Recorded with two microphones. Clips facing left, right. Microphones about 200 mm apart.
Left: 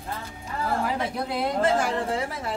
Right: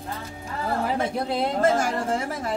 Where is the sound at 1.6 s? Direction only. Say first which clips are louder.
Right 1 dB; 45° right (ahead or behind).